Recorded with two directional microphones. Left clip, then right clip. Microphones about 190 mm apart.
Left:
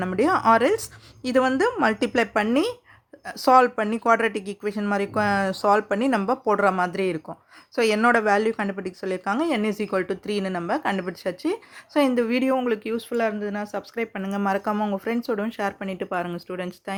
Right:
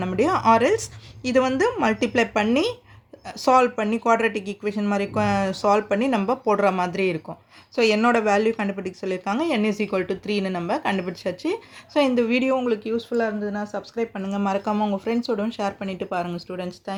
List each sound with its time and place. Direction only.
0.0 s speech: 25° left (ahead or behind)